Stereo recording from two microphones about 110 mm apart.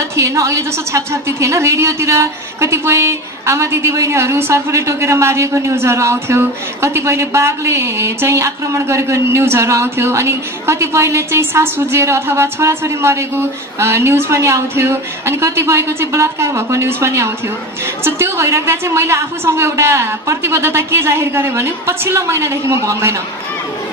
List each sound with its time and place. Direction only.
0.1 s a woman's voice: 30° right (ahead or behind)